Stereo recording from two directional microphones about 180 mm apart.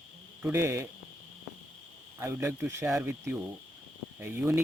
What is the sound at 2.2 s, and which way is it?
Speech, 15° right (ahead or behind).